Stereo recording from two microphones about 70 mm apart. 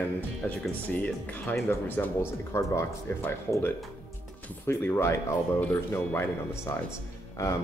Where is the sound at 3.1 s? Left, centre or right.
Left.